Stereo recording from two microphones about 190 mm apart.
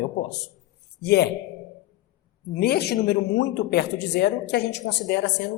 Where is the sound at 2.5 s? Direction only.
55° left (ahead or behind).